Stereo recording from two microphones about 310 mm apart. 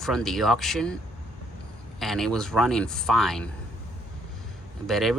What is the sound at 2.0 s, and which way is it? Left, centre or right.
Speech, centre.